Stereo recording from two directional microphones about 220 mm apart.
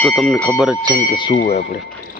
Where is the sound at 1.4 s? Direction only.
35° left (ahead or behind).